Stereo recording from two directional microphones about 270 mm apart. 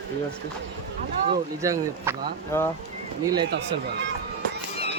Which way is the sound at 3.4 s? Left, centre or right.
Right.